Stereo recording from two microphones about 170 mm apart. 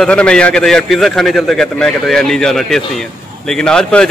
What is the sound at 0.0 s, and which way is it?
A man's voice, 5° left (ahead or behind).